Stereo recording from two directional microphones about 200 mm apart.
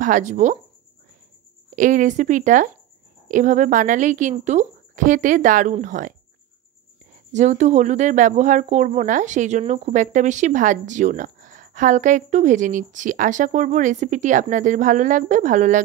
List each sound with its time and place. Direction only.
0.0 s speech: 40° right (ahead or behind)
1.8 s speech: 40° right (ahead or behind)
7.3 s speech: 35° right (ahead or behind)